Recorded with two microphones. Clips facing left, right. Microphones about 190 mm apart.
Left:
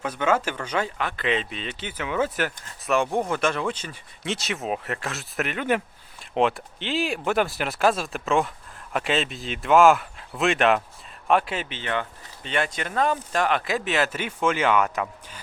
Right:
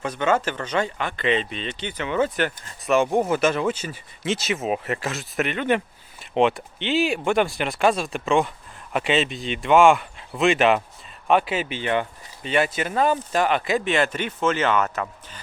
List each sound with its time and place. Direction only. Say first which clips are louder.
0.0 s speech: right 1 dB; 5° left (ahead or behind)